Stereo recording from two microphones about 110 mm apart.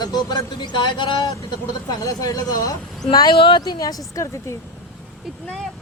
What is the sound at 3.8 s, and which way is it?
Speech, 30° left (ahead or behind).